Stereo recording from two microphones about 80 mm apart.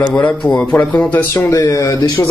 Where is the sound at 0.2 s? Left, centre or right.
Left.